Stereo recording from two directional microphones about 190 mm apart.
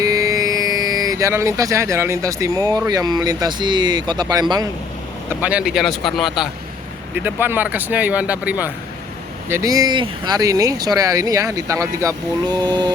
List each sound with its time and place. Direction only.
0.0 s speech: 20° right (ahead or behind)
5.3 s speech: 10° right (ahead or behind)